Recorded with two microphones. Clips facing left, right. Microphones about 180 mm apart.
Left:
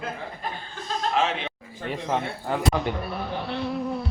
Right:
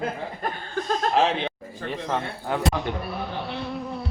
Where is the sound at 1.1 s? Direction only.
35° right (ahead or behind).